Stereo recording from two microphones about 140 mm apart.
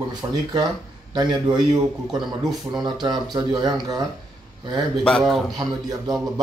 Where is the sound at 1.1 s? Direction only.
30° right (ahead or behind).